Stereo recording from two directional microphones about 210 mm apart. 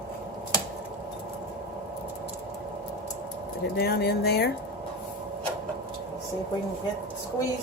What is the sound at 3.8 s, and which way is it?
Speech, 50° left (ahead or behind).